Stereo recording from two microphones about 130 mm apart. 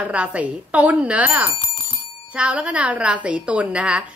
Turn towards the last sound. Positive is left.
turn(degrees=-10)  # may be behind; listen again after turning